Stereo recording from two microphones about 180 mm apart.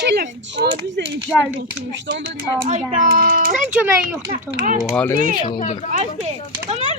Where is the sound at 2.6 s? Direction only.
45° right (ahead or behind).